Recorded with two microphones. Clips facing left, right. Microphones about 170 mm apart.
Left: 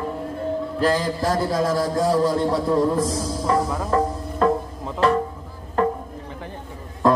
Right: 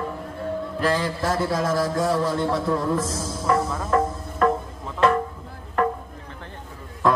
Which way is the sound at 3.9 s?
30° left (ahead or behind).